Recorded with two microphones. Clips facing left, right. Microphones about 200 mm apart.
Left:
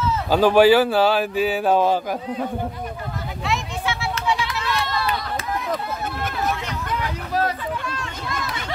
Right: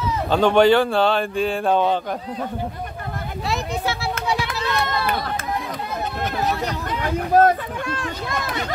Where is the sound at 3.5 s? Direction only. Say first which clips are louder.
Right 1 dB; 40° right (ahead or behind).